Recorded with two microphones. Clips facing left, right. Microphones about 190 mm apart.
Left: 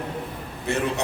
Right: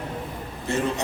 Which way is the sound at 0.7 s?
65° left (ahead or behind).